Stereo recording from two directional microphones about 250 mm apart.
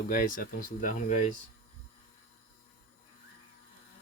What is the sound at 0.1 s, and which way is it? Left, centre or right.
Speech, left.